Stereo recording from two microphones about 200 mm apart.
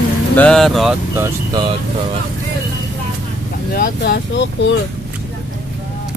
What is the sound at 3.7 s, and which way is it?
Speech, 50° left (ahead or behind).